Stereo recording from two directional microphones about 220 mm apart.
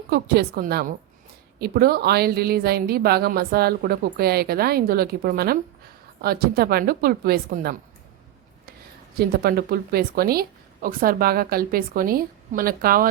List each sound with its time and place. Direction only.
0.1 s a woman's voice: 45° right (ahead or behind)
9.1 s a woman's voice: 45° right (ahead or behind)